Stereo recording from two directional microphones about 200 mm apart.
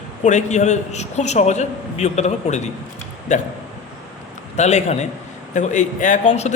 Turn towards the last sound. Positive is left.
turn(degrees=35)  # may be behind; listen again after turning